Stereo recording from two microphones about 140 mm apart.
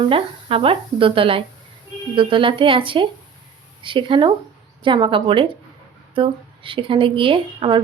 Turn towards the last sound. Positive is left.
turn(degrees=-35)  # may be behind; listen again after turning